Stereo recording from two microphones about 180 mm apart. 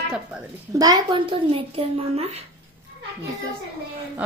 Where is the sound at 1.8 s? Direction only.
35° right (ahead or behind).